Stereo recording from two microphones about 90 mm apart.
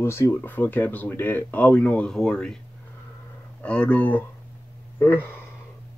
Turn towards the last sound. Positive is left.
turn(degrees=20)  # may be behind; listen again after turning